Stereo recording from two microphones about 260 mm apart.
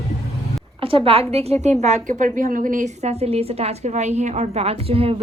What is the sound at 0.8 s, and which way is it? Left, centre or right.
A woman's voice, right.